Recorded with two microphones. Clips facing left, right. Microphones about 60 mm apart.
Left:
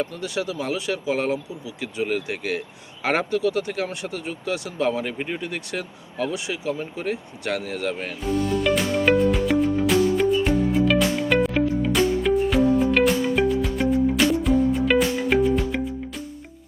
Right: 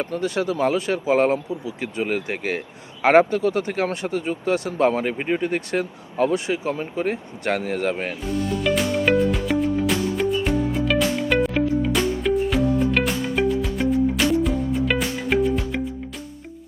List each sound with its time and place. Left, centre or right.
0.0 s speech: right
8.6 s music: centre